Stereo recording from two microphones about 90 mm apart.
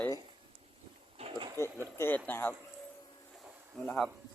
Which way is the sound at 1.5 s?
30° left (ahead or behind).